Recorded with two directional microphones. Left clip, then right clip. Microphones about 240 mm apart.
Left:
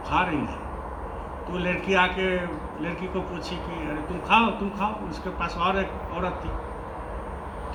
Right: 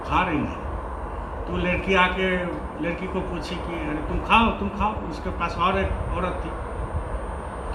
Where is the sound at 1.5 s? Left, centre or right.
Left.